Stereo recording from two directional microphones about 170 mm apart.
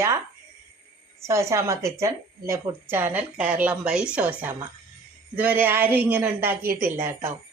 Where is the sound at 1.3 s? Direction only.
15° right (ahead or behind).